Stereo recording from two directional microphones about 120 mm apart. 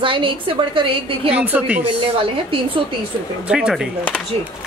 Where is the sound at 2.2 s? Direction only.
45° right (ahead or behind).